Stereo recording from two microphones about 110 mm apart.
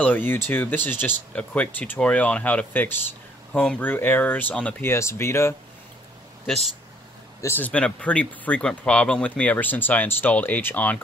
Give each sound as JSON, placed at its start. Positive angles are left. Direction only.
{"t": 0.0, "sound": "speech", "side_deg": 15}
{"t": 4.9, "sound": "speech", "side_deg": 25}
{"t": 7.4, "sound": "speech", "side_deg": 15}